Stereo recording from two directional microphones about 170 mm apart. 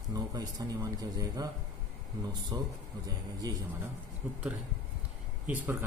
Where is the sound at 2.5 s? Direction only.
25° right (ahead or behind).